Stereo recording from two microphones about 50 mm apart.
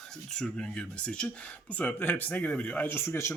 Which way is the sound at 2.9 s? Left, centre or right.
Left.